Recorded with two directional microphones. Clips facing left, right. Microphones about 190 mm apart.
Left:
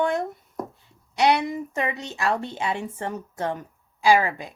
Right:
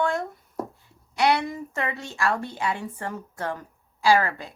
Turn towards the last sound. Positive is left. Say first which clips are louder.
# left 1 dB
turn(degrees=15)  # may be behind; listen again after turning